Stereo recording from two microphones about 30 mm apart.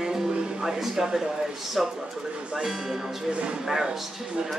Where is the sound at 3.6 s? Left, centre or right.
Centre.